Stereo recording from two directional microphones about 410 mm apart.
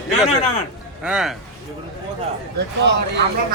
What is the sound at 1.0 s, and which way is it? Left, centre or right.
Speech, centre.